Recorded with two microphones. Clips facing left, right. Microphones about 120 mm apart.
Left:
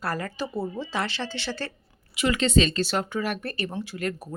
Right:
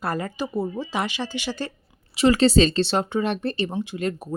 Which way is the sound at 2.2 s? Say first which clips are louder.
Right 6 dB; 35° right (ahead or behind).